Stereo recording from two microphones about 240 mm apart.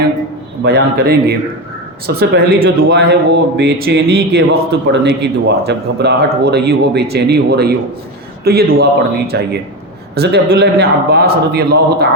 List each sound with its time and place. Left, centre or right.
0.6 s a man's voice: right